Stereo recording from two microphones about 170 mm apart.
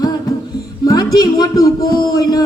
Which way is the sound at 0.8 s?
20° left (ahead or behind).